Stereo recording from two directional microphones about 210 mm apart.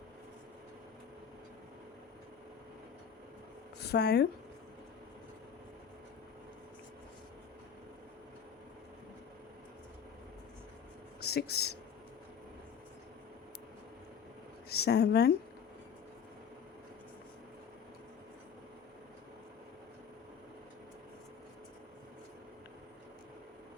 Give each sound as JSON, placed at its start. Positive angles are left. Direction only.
{"t": 3.8, "sound": "speech", "side_deg": 50}
{"t": 11.2, "sound": "speech", "side_deg": 50}
{"t": 14.7, "sound": "a woman's voice", "side_deg": 50}